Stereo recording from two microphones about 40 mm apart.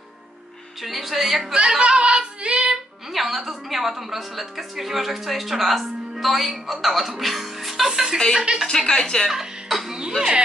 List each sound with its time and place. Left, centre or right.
0.8 s a woman's voice: centre
1.8 s child singing: right
3.1 s a woman's voice: centre
8.8 s speech: centre
9.3 s speech: centre